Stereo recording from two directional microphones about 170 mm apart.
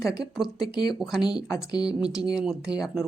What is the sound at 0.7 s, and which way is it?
Speech, 25° left (ahead or behind).